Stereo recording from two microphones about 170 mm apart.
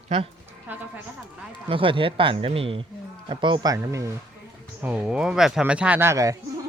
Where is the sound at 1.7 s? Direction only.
30° right (ahead or behind).